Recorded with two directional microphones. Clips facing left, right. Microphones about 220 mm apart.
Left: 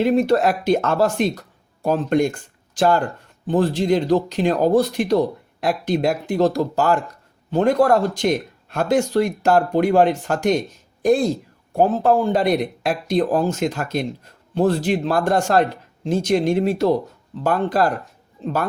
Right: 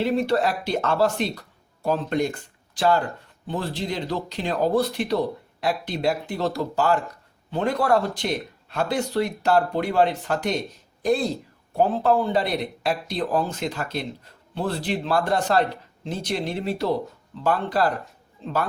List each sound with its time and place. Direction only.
0.0 s speech: 45° left (ahead or behind)